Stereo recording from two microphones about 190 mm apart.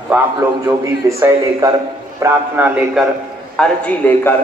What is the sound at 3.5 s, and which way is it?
Speech, 5° left (ahead or behind).